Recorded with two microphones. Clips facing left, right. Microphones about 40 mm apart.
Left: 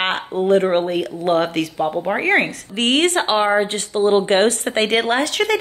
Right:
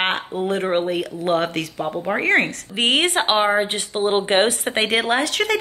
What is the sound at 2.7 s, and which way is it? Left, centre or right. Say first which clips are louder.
A woman's voice: left 2 dB; centre.